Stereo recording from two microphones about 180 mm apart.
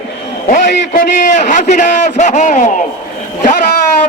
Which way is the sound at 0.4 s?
45° left (ahead or behind).